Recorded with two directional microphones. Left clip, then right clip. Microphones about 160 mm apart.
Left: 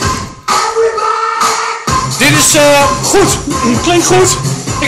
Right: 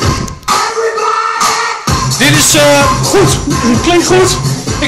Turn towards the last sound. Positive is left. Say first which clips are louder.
# even
turn(degrees=10)  # may be behind; listen again after turning